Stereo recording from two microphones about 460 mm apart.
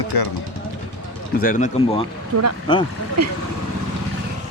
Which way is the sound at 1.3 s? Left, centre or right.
Centre.